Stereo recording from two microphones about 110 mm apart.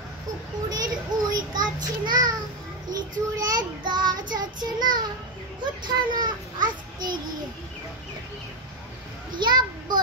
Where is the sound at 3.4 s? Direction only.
35° right (ahead or behind).